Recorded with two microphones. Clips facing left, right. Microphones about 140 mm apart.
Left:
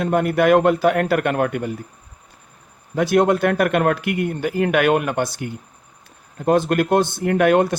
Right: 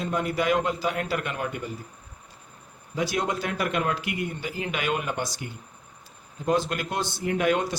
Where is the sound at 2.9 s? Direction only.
55° left (ahead or behind).